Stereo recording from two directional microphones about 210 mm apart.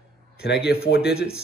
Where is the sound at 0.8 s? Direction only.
50° left (ahead or behind).